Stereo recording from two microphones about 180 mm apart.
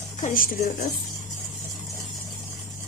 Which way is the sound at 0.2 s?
50° left (ahead or behind).